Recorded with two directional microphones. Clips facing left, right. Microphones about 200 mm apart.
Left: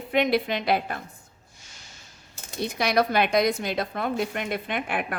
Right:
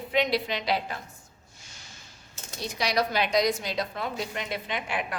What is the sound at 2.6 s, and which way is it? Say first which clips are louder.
A woman's voice: left 4 dB; 55° left (ahead or behind).